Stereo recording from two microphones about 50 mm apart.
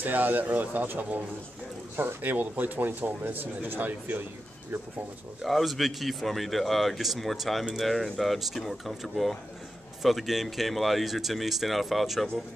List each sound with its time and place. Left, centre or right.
0.0 s speech: right
2.0 s speech: right
2.3 s speech: right
5.4 s speech: centre